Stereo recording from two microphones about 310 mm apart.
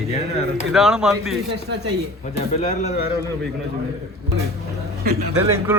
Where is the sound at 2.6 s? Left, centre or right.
Centre.